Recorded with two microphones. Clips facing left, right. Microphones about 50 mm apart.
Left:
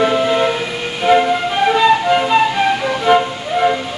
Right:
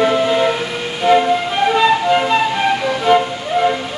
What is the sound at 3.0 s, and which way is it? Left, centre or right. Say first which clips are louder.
Flute: left 1 dB; centre.